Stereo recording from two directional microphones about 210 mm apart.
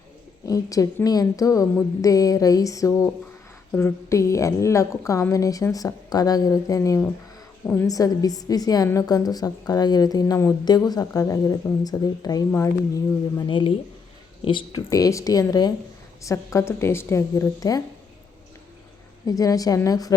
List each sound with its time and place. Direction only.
0.4 s a woman's voice: 15° left (ahead or behind)
19.2 s a woman's voice: 15° left (ahead or behind)